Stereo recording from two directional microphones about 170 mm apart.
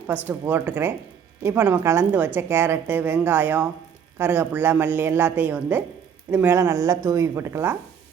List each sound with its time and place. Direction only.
0.3 s a woman's voice: 10° right (ahead or behind)